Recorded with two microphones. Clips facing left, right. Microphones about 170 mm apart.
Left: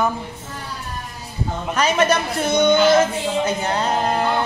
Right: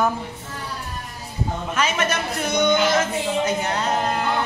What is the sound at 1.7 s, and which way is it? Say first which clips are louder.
A woman's voice: left 6 dB; 35° left (ahead or behind).